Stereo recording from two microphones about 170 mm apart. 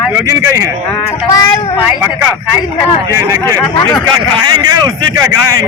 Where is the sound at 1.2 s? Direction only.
20° left (ahead or behind).